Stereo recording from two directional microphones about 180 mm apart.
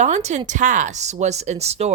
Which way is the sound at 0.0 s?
40° right (ahead or behind).